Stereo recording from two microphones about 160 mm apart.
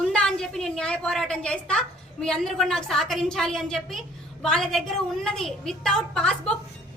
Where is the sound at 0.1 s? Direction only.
5° left (ahead or behind).